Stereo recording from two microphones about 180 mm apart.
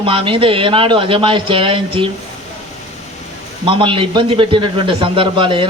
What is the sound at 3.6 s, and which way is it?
A man's voice, 30° right (ahead or behind).